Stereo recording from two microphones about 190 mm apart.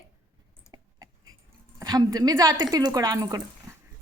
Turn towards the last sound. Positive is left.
turn(degrees=-20)  # may be behind; listen again after turning